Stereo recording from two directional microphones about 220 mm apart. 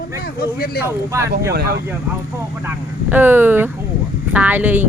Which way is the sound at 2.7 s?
10° right (ahead or behind).